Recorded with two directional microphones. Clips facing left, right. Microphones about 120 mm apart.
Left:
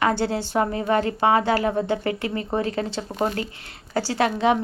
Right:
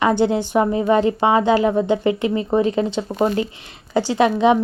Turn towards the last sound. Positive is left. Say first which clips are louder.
# right 5 dB
turn(degrees=-20)  # may be behind; listen again after turning